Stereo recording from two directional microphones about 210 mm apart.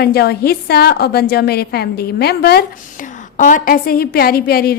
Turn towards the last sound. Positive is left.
turn(degrees=45)  # may be behind; listen again after turning